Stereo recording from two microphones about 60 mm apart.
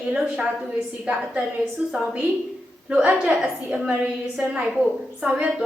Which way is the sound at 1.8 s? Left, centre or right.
Right.